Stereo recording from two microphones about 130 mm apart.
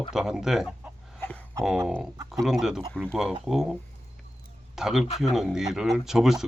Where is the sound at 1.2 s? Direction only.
15° left (ahead or behind).